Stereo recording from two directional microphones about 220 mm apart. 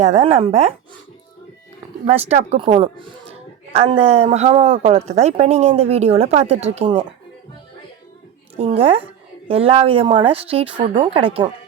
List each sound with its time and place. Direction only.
0.0 s speech: 30° right (ahead or behind)
2.0 s speech: 30° right (ahead or behind)
8.5 s speech: 25° right (ahead or behind)